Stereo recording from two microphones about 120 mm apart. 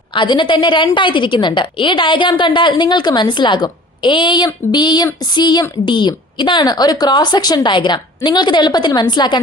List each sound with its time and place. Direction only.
0.1 s a woman's voice: 40° left (ahead or behind)